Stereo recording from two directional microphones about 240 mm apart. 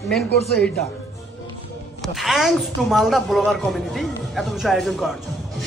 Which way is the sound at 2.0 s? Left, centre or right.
Centre.